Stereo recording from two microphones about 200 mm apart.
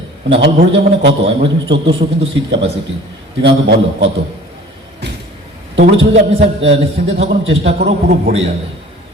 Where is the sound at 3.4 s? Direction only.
60° right (ahead or behind).